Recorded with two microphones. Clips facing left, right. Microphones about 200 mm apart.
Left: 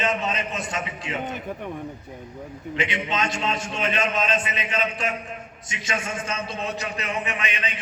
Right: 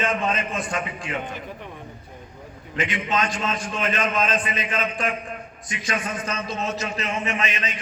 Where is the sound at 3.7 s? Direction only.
45° right (ahead or behind).